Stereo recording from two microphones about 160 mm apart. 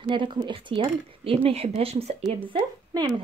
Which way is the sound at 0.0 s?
30° right (ahead or behind).